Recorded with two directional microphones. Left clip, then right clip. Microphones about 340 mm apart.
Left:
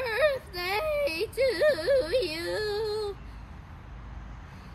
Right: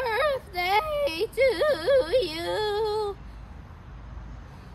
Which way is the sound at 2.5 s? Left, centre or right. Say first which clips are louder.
Right 5 dB; centre.